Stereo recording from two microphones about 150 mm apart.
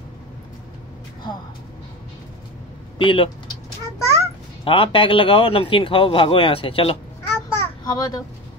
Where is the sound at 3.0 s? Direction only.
35° left (ahead or behind).